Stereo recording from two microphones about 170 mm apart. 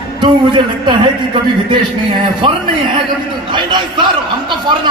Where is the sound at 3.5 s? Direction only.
25° right (ahead or behind).